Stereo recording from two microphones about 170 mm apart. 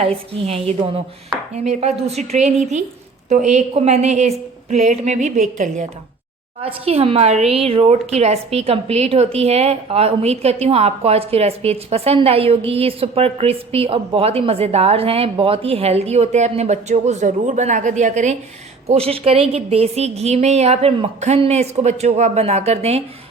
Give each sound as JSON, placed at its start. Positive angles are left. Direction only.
{"t": 0.4, "sound": "a woman's voice", "side_deg": -35}